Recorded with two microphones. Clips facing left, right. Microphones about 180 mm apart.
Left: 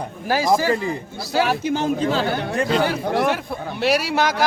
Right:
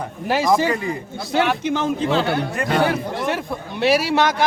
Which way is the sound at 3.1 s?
70° left (ahead or behind).